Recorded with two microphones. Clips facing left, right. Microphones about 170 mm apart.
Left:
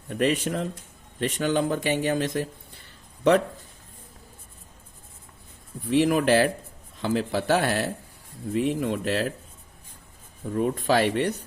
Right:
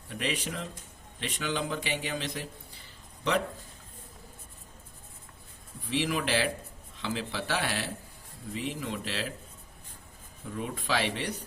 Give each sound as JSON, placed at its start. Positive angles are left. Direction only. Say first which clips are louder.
{"t": 0.1, "sound": "speech", "louder": "left 10 dB", "side_deg": 50}
{"t": 5.9, "sound": "speech", "louder": "left 9 dB", "side_deg": 45}
{"t": 10.5, "sound": "speech", "louder": "left 9 dB", "side_deg": 45}